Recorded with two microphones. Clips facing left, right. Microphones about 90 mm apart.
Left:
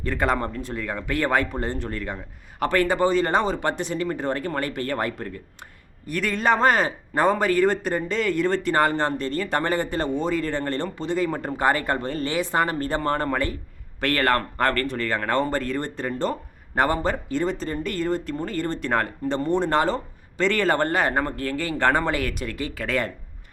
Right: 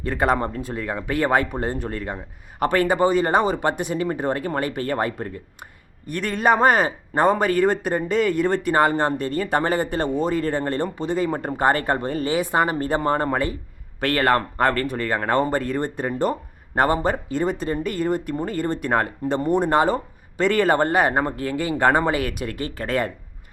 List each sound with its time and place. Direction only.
0.1 s speech: 10° right (ahead or behind)
6.3 s speech: 10° right (ahead or behind)
22.5 s speech: 40° right (ahead or behind)